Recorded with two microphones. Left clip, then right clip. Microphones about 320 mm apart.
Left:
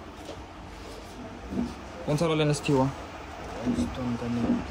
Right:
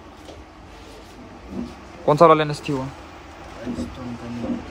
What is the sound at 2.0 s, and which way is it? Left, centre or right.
Speech, right.